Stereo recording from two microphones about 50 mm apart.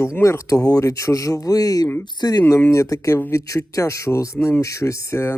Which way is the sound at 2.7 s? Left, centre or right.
Left.